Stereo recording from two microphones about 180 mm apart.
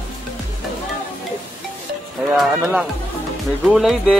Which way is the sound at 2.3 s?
Centre (ahead or behind).